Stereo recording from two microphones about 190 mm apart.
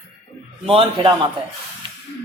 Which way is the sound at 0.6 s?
30° right (ahead or behind).